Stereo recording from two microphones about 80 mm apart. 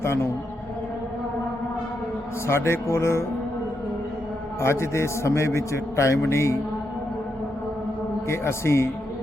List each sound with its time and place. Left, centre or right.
0.0 s a man's voice: left
2.5 s a man's voice: left
4.6 s a man's voice: left
8.3 s a man's voice: left